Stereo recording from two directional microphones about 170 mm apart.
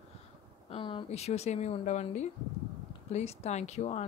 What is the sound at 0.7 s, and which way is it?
A woman's voice, 30° left (ahead or behind).